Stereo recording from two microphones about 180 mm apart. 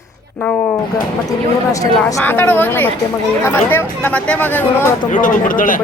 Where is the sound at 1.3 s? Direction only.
20° left (ahead or behind).